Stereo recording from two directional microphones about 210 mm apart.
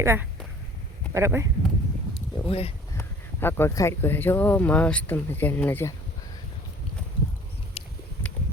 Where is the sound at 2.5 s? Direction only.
30° left (ahead or behind).